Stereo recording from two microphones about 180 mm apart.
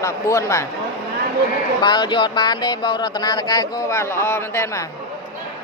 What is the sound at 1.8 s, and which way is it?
Speech, 25° left (ahead or behind).